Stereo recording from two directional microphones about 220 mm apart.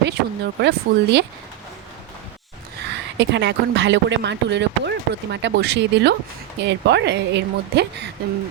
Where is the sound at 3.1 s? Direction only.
50° right (ahead or behind).